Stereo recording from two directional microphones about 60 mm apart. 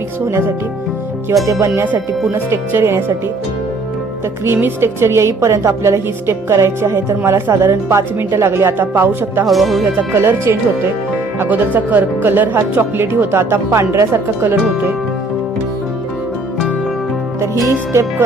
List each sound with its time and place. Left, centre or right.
0.3 s a woman's voice: right
2.3 s a woman's voice: right
4.4 s a woman's voice: right
9.5 s speech: centre
10.2 s a woman's voice: right
11.4 s a woman's voice: right
17.4 s a woman's voice: right